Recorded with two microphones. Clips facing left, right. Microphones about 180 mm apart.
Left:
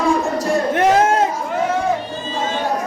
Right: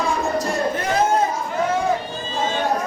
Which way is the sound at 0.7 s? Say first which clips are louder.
Left 6 dB; 90° left.